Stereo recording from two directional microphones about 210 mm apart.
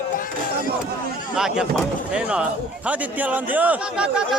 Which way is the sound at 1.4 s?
Centre (ahead or behind).